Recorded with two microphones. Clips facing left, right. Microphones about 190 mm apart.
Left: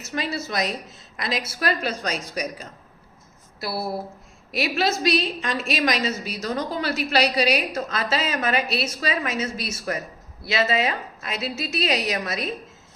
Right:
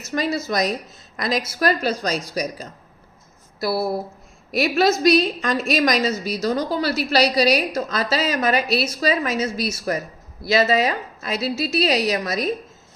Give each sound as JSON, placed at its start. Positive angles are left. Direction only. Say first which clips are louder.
{"t": 0.0, "sound": "a woman's voice", "louder": "right 5 dB", "side_deg": -40}